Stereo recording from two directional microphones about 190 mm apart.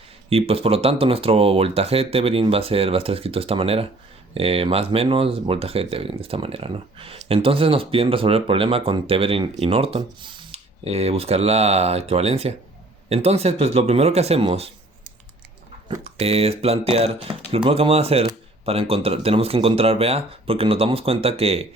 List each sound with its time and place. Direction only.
0.3 s speech: 30° right (ahead or behind)
15.9 s speech: 30° right (ahead or behind)